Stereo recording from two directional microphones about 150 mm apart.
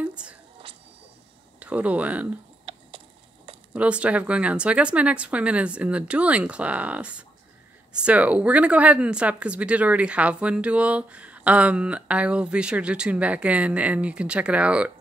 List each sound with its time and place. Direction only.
0.0 s squish: 10° right (ahead or behind)
1.6 s speech: 10° right (ahead or behind)
2.7 s a sound: 35° right (ahead or behind)
3.7 s speech: 10° right (ahead or behind)